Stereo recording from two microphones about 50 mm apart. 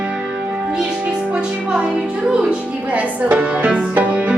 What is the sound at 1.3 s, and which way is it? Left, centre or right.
Speech, centre.